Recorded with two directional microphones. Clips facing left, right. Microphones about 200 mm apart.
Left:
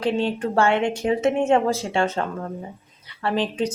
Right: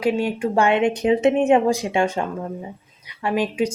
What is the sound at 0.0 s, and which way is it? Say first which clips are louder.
A woman's voice: right 2 dB; 10° right (ahead or behind).